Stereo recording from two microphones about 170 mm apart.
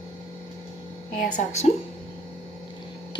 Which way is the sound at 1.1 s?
50° left (ahead or behind).